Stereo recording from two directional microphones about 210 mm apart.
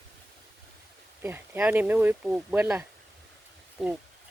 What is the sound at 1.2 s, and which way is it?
Speech, 10° right (ahead or behind).